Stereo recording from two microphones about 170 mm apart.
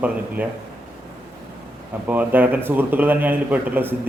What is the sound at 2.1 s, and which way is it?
A man's voice, 10° right (ahead or behind).